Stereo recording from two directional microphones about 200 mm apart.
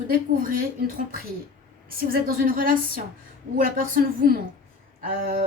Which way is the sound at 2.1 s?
45° right (ahead or behind).